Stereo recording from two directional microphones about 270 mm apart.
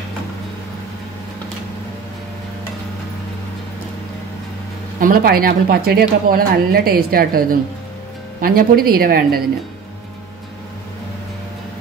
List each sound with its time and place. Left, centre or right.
5.0 s speech: right